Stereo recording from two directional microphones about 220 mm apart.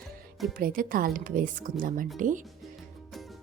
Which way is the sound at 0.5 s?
40° right (ahead or behind).